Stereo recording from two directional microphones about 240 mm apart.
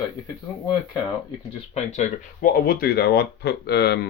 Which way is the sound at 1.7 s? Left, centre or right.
Left.